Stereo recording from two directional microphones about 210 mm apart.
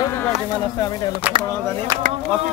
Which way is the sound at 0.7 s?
20° left (ahead or behind).